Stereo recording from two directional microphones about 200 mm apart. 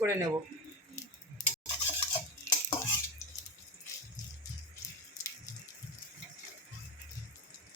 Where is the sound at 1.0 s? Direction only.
15° left (ahead or behind).